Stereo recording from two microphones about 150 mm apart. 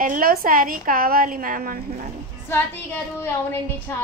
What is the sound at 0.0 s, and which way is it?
A woman's voice, 70° right (ahead or behind).